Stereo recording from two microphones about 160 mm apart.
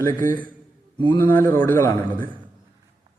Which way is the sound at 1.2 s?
10° left (ahead or behind).